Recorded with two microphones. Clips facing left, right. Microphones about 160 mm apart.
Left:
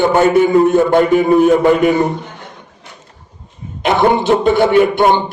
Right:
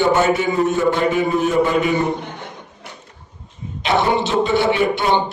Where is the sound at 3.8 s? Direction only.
50° left (ahead or behind).